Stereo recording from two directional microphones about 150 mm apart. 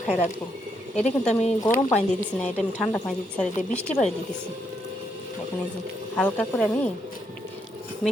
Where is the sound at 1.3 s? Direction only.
45° left (ahead or behind).